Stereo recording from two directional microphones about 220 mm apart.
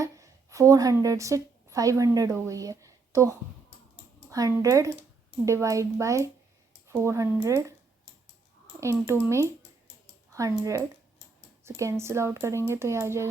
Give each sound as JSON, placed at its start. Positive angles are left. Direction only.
{"t": 0.0, "sound": "a woman's voice", "side_deg": -15}
{"t": 8.8, "sound": "speech", "side_deg": -15}
{"t": 10.6, "sound": "speech", "side_deg": -15}